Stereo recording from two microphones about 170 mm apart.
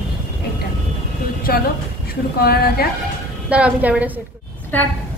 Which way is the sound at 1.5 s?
65° left (ahead or behind).